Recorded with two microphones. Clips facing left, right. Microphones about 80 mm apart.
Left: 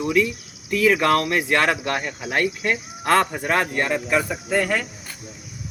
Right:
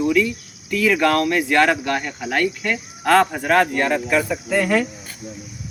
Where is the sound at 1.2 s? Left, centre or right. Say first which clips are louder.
Right 3 dB; left.